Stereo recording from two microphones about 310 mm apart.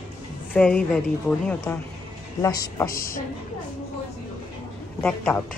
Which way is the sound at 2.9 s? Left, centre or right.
Left.